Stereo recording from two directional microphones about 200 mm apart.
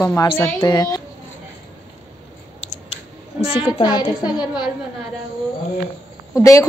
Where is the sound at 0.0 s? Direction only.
15° left (ahead or behind).